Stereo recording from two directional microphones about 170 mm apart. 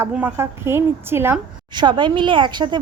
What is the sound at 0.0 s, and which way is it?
A woman's voice, 10° right (ahead or behind).